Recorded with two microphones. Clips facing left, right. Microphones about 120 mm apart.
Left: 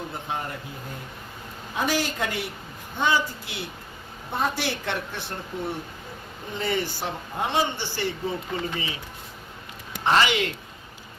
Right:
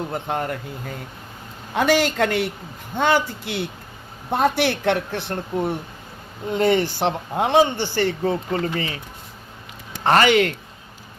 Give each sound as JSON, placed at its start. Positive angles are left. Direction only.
{"t": 0.1, "sound": "speech", "side_deg": -70}
{"t": 1.7, "sound": "a man's voice", "side_deg": -80}
{"t": 10.0, "sound": "a man's voice", "side_deg": -55}